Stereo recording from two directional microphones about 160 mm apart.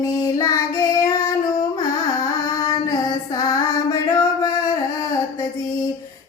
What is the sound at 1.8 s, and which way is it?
Music, 20° left (ahead or behind).